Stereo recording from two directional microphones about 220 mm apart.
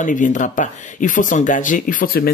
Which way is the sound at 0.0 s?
35° left (ahead or behind).